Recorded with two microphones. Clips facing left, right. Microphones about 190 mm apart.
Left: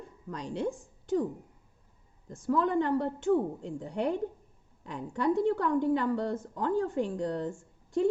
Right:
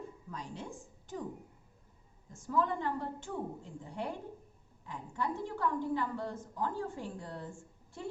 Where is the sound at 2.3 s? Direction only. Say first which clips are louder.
Left 6 dB; 75° left (ahead or behind).